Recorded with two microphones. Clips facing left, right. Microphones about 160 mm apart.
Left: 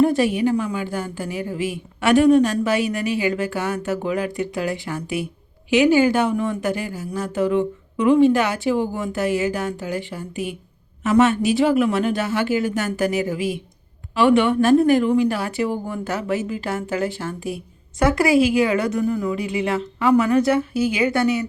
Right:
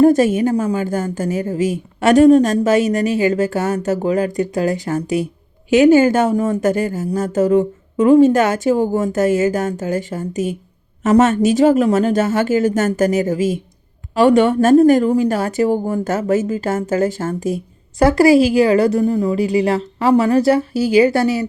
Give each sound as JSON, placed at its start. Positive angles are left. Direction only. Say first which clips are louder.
{"t": 0.0, "sound": "a woman's voice", "louder": "right 5 dB", "side_deg": -45}